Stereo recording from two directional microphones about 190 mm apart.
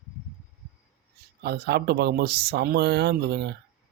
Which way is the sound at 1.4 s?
60° right (ahead or behind).